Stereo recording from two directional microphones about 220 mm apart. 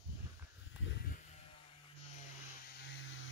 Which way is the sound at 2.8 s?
60° left (ahead or behind).